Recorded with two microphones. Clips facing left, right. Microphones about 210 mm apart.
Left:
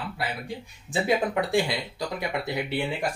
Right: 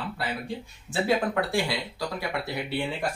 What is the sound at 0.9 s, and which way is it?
Speech, 20° left (ahead or behind).